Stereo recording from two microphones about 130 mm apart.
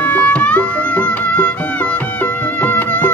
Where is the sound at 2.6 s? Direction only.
15° left (ahead or behind).